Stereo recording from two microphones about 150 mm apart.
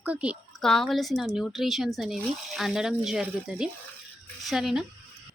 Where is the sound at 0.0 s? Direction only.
10° right (ahead or behind).